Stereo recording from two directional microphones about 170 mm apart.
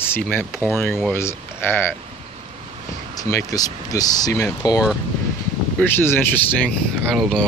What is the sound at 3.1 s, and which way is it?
Speech, 20° left (ahead or behind).